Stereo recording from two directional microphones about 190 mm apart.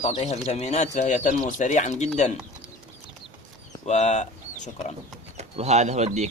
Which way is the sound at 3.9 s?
35° left (ahead or behind).